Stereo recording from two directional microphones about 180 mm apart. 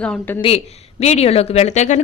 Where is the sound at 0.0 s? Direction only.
10° left (ahead or behind).